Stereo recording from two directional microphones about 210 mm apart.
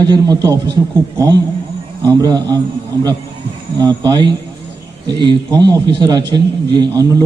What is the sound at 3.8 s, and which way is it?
A man's voice, 20° right (ahead or behind).